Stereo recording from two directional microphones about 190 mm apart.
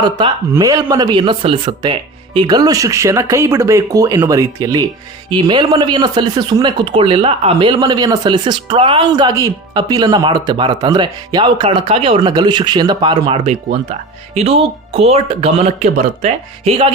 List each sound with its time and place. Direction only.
0.5 s speech: 20° right (ahead or behind)